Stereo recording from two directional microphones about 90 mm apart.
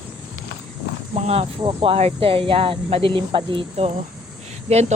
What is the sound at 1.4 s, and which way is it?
Speech, 90° right.